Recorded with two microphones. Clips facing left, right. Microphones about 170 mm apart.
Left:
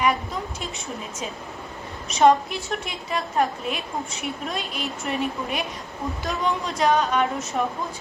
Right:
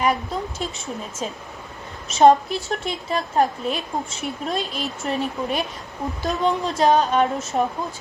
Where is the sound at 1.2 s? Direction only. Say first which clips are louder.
Right 2 dB; 35° right (ahead or behind).